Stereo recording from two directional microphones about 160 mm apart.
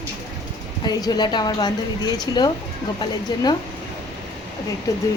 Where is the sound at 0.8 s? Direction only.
25° left (ahead or behind).